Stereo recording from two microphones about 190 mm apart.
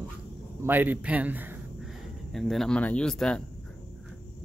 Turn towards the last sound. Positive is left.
turn(degrees=5)  # may be behind; listen again after turning